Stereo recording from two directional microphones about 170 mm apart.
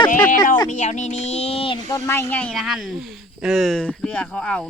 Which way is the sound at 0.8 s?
45° left (ahead or behind).